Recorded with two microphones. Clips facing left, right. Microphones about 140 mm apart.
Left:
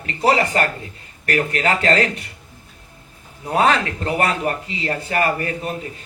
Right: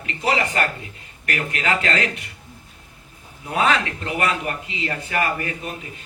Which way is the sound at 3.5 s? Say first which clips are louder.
Left 3 dB; 35° left (ahead or behind).